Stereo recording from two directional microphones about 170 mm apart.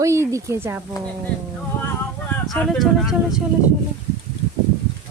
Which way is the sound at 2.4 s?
5° left (ahead or behind).